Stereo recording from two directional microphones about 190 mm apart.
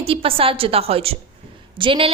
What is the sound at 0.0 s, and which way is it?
A woman's voice, 30° right (ahead or behind).